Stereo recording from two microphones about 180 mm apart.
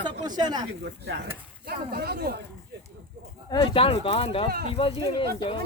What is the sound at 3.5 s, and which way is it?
Speech, 30° left (ahead or behind).